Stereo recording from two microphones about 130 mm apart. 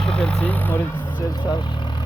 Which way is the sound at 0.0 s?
5° left (ahead or behind).